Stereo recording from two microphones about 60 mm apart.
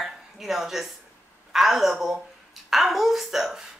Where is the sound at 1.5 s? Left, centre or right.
Centre.